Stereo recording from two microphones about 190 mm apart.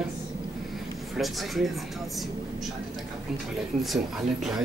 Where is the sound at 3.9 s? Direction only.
Centre (ahead or behind).